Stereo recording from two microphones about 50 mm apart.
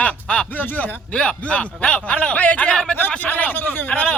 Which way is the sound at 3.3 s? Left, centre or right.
Left.